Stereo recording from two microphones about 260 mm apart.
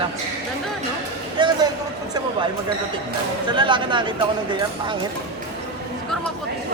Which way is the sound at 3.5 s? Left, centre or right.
Centre.